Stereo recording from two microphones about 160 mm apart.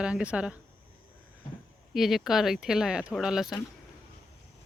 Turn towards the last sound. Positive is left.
turn(degrees=-5)  # may be behind; listen again after turning